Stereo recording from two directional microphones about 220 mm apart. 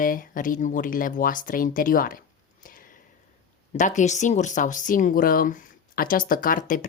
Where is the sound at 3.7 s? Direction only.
35° left (ahead or behind).